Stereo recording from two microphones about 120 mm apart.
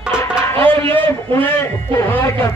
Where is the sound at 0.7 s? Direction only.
50° right (ahead or behind).